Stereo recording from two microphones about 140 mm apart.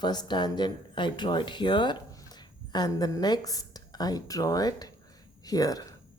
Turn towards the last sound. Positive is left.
turn(degrees=25)  # may be behind; listen again after turning